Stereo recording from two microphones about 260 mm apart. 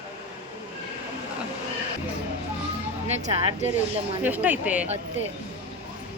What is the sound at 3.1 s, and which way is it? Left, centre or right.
Speech, right.